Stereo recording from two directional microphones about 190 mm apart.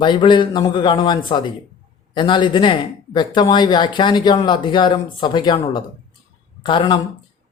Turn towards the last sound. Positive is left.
turn(degrees=25)  # may be behind; listen again after turning